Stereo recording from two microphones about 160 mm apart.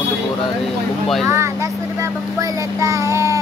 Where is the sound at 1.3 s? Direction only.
15° right (ahead or behind).